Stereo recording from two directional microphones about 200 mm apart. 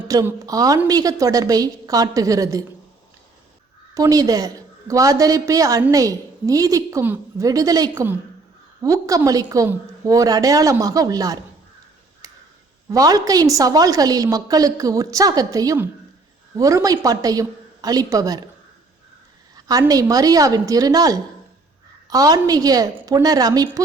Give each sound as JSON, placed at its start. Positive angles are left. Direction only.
{"t": 0.1, "sound": "a woman's voice", "side_deg": -15}
{"t": 3.9, "sound": "a woman's voice", "side_deg": -15}
{"t": 12.9, "sound": "a woman's voice", "side_deg": -15}
{"t": 19.5, "sound": "a woman's voice", "side_deg": -20}